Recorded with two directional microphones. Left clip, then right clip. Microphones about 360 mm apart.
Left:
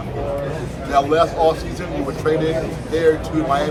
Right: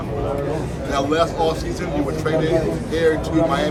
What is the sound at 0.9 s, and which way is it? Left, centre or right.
Speech, centre.